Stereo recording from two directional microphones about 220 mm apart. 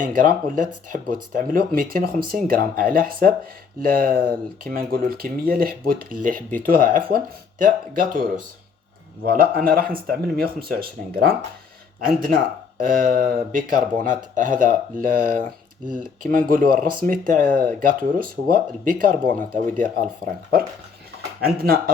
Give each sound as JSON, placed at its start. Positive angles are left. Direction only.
{"t": 0.0, "sound": "speech", "side_deg": -40}
{"t": 9.2, "sound": "speech", "side_deg": -40}
{"t": 21.4, "sound": "speech", "side_deg": -45}